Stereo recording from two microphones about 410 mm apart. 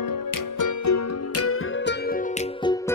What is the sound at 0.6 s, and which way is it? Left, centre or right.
Music, left.